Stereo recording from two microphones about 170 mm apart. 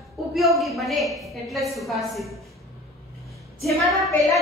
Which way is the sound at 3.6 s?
Centre (ahead or behind).